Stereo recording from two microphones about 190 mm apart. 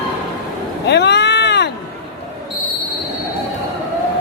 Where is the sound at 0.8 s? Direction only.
65° left (ahead or behind).